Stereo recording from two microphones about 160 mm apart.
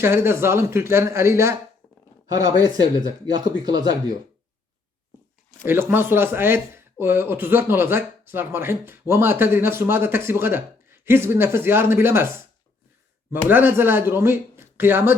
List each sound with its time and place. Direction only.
0.0 s speech: 15° right (ahead or behind)
5.6 s speech: 15° right (ahead or behind)
13.3 s speech: 10° right (ahead or behind)